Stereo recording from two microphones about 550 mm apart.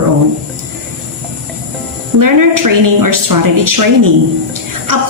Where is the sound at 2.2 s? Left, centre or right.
Right.